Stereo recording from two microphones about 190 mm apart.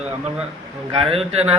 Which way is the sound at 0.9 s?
30° right (ahead or behind).